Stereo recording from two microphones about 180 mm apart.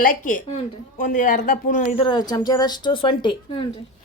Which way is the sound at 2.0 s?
25° left (ahead or behind).